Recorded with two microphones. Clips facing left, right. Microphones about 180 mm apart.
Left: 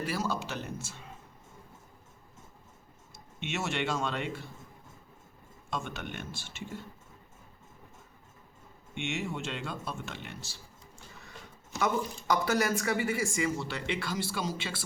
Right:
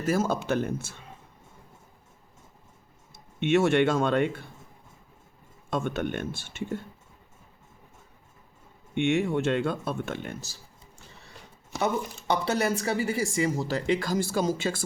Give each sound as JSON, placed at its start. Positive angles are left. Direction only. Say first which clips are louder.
{"t": 0.0, "sound": "speech", "louder": "right 7 dB", "side_deg": -45}
{"t": 3.4, "sound": "speech", "louder": "right 12 dB", "side_deg": -55}
{"t": 5.7, "sound": "speech", "louder": "right 9 dB", "side_deg": -50}
{"t": 9.0, "sound": "speech", "louder": "right 11 dB", "side_deg": -55}
{"t": 12.3, "sound": "speech", "louder": "right 2 dB", "side_deg": -30}